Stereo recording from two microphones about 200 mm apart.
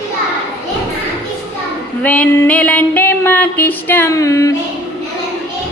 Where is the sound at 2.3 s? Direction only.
5° left (ahead or behind).